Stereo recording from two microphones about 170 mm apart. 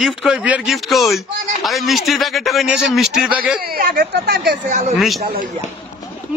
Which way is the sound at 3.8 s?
65° right (ahead or behind).